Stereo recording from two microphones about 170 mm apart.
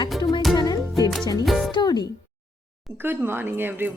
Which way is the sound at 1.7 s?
25° left (ahead or behind).